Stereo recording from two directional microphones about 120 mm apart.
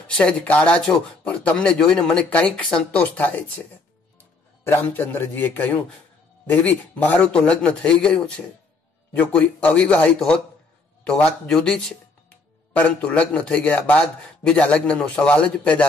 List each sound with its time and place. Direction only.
0.1 s a man's voice: 10° left (ahead or behind)